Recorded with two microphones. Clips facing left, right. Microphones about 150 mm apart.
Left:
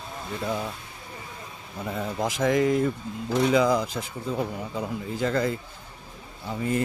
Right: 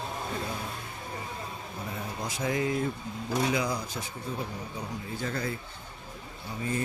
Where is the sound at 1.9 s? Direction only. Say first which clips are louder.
Left 10 dB; 90° left.